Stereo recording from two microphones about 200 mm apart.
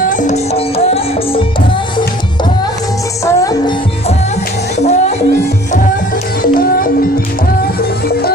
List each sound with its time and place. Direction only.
0.0 s music: 40° left (ahead or behind)
3.3 s music: 15° left (ahead or behind)
4.7 s music: 35° left (ahead or behind)
6.4 s music: 45° left (ahead or behind)